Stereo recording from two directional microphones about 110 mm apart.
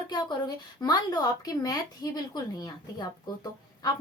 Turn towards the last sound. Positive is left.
turn(degrees=35)  # may be behind; listen again after turning